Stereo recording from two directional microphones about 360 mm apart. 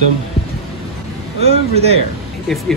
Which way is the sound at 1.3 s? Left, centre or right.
Centre.